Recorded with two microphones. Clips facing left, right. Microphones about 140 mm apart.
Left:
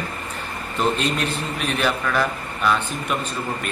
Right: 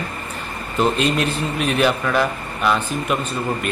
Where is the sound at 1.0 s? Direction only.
Centre (ahead or behind).